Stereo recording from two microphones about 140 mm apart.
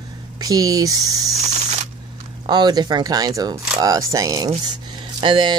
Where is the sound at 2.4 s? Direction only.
30° right (ahead or behind).